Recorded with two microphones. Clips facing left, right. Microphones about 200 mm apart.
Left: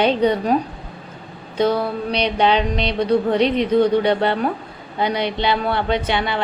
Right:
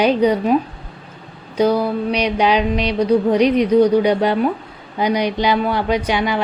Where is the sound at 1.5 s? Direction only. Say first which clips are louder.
Right 3 dB; 10° right (ahead or behind).